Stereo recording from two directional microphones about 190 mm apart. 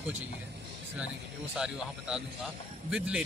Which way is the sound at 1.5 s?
5° right (ahead or behind).